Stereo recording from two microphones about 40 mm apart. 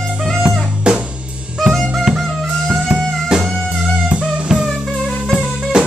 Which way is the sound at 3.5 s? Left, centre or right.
Centre.